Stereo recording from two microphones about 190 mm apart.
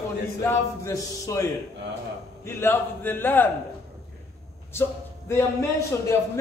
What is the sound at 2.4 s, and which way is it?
A man's voice, 10° left (ahead or behind).